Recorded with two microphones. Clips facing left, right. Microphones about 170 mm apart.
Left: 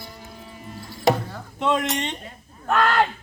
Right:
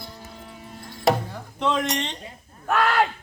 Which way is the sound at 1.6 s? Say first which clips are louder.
Left 1 dB; 5° left (ahead or behind).